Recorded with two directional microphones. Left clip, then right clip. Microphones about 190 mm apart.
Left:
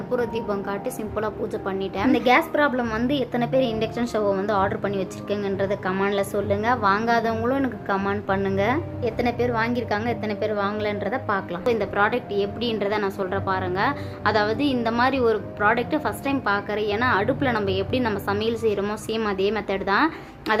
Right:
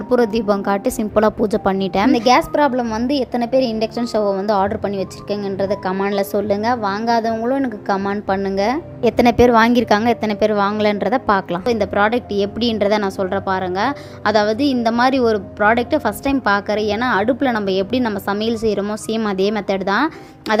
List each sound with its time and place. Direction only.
0.1 s a woman's voice: 65° right (ahead or behind)
2.0 s a woman's voice: 30° right (ahead or behind)
7.0 s a woman's voice: 15° right (ahead or behind)
7.5 s a woman's voice: 35° right (ahead or behind)
9.0 s a woman's voice: 60° right (ahead or behind); by 20.1 s 40° right (ahead or behind)